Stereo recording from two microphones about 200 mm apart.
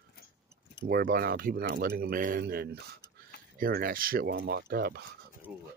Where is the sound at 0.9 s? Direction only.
45° right (ahead or behind).